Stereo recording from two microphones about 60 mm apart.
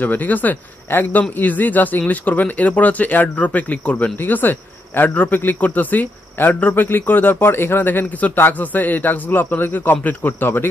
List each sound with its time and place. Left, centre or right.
0.0 s speech: left
4.2 s a man's voice: left